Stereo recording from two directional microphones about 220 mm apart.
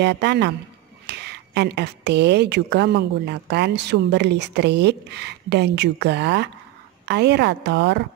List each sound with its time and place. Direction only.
0.0 s a woman's voice: 50° right (ahead or behind)